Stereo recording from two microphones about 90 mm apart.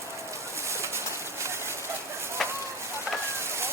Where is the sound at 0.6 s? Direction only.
30° right (ahead or behind).